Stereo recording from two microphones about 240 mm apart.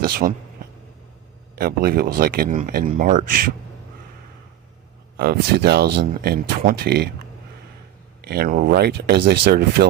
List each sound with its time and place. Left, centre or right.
0.0 s speech: right
1.5 s speech: right
5.1 s speech: right
8.2 s speech: right